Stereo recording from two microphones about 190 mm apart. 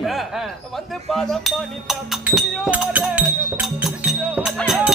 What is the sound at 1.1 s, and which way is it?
Speech, centre (ahead or behind).